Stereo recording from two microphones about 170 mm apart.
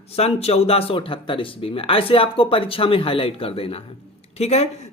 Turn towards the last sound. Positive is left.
turn(degrees=40)  # may be behind; listen again after turning